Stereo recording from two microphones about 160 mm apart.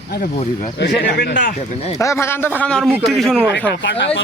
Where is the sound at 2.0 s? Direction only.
20° left (ahead or behind); by 3.4 s centre (ahead or behind).